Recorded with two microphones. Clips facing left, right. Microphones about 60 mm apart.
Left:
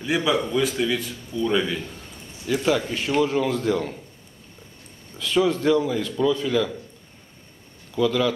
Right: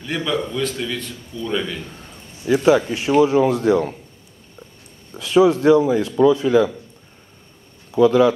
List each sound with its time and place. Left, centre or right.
0.0 s a man's voice: centre
2.4 s speech: centre
3.3 s speech: right
5.2 s speech: centre
8.0 s speech: right